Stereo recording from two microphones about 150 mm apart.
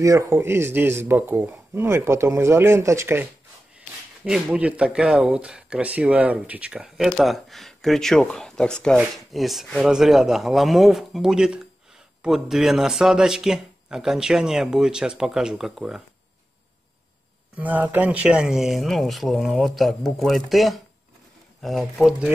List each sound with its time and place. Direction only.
0.0 s speech: 20° right (ahead or behind); by 16.0 s 5° right (ahead or behind)
17.6 s speech: 10° right (ahead or behind)